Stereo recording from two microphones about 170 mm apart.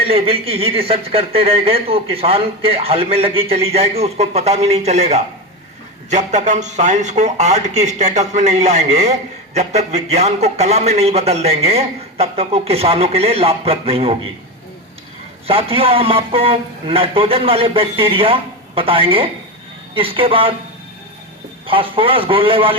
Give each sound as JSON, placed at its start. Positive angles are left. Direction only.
{"t": 0.0, "sound": "speech", "side_deg": -35}
{"t": 15.4, "sound": "speech", "side_deg": -35}
{"t": 21.7, "sound": "speech", "side_deg": -30}